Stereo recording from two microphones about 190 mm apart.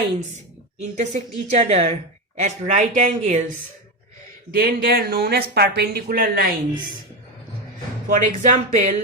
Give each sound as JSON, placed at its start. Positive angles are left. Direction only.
{"t": 0.8, "sound": "speech", "side_deg": -40}
{"t": 4.5, "sound": "speech", "side_deg": -50}
{"t": 8.1, "sound": "speech", "side_deg": -40}